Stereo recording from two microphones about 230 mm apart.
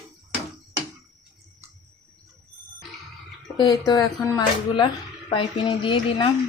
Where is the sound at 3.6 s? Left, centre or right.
Centre.